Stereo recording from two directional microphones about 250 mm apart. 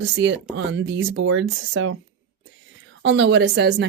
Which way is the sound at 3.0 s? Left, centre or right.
Right.